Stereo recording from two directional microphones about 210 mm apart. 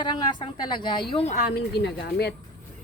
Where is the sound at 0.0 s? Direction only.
20° left (ahead or behind).